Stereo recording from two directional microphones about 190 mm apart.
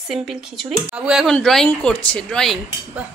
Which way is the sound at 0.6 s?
Centre (ahead or behind).